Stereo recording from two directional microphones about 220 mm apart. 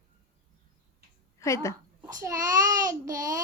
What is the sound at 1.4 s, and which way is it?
Speech, 15° left (ahead or behind).